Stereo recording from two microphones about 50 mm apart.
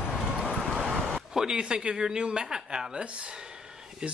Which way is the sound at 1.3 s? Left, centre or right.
Centre.